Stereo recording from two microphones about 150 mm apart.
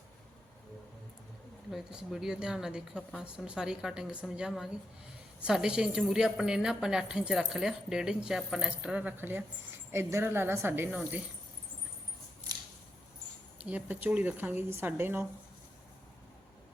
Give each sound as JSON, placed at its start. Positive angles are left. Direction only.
{"t": 1.7, "sound": "a woman's voice", "side_deg": 0}
{"t": 13.6, "sound": "speech", "side_deg": -10}